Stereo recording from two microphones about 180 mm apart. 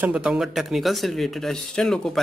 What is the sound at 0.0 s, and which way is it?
A man's voice, 5° right (ahead or behind).